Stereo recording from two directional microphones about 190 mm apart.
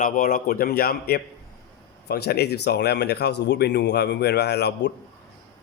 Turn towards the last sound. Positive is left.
turn(degrees=60)  # may be behind; listen again after turning